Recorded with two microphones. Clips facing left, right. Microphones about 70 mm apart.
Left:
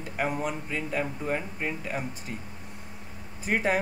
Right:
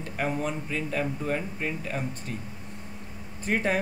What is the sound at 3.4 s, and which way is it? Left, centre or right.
Speech, centre.